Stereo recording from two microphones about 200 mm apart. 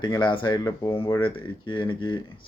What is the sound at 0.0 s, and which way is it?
Speech, 20° left (ahead or behind).